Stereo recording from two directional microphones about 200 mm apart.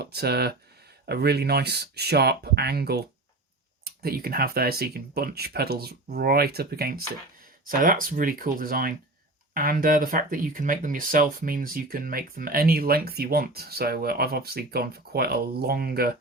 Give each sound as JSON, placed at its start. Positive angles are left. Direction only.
{"t": 0.0, "sound": "speech", "side_deg": -55}